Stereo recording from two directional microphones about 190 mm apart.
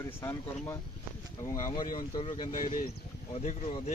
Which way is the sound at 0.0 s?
15° left (ahead or behind).